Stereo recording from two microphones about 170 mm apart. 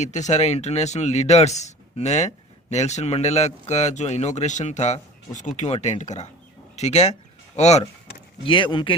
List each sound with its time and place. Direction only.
0.0 s speech: 45° left (ahead or behind)
8.4 s speech: 30° left (ahead or behind)